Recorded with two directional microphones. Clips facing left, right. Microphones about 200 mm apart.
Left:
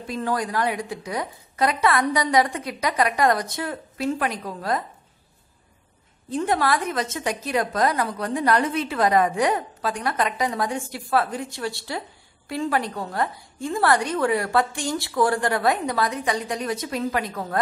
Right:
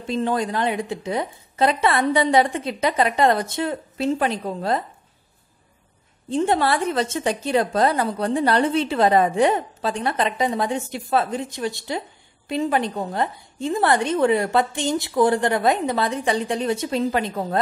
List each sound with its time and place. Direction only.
0.0 s a woman's voice: 25° right (ahead or behind)
6.3 s a woman's voice: 25° right (ahead or behind)